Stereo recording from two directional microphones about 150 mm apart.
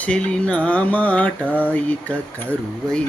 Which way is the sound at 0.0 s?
5° left (ahead or behind).